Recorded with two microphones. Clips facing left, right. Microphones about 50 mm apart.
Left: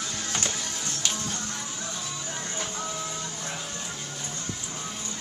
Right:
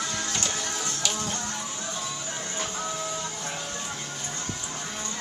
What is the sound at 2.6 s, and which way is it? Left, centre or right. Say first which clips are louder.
Printer: right 3 dB; centre.